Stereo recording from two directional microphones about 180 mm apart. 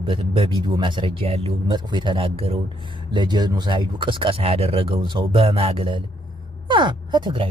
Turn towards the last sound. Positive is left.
turn(degrees=-25)  # may be behind; listen again after turning